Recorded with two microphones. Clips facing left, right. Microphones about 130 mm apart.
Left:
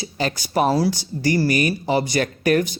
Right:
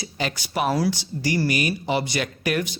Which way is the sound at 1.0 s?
45° left (ahead or behind).